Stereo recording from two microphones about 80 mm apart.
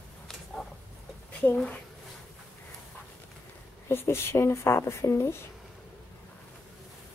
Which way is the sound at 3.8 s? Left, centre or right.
Left.